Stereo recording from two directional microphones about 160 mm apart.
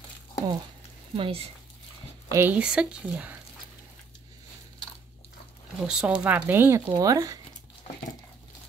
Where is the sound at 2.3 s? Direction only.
15° right (ahead or behind).